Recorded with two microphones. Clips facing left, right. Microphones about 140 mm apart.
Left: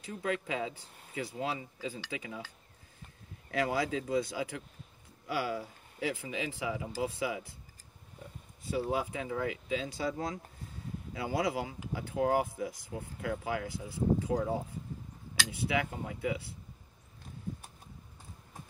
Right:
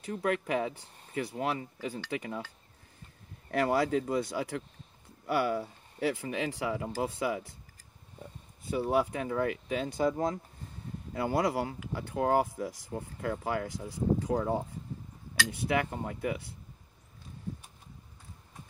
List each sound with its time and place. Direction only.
0.0 s speech: 60° right (ahead or behind)
3.5 s speech: 60° right (ahead or behind)
8.6 s speech: 60° right (ahead or behind)
11.1 s speech: 60° right (ahead or behind)
15.6 s speech: 65° right (ahead or behind)